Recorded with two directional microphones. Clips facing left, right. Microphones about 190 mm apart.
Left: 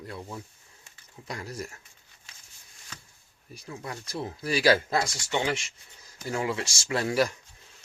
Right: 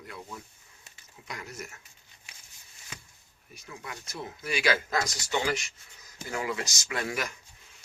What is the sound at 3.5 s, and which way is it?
Speech, 35° left (ahead or behind).